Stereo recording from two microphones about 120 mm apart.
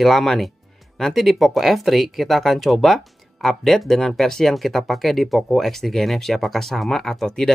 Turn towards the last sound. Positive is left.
turn(degrees=5)  # may be behind; listen again after turning